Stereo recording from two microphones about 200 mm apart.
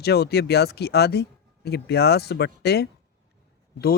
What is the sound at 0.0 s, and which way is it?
Speech, 55° left (ahead or behind).